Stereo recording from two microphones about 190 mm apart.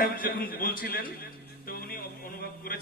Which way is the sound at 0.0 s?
50° left (ahead or behind).